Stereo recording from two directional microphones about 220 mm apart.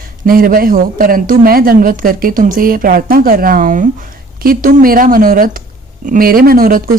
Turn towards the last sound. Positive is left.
turn(degrees=-40)  # may be behind; listen again after turning